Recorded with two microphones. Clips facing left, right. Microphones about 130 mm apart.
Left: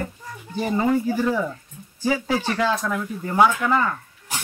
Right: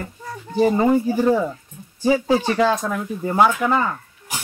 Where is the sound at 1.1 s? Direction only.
40° right (ahead or behind).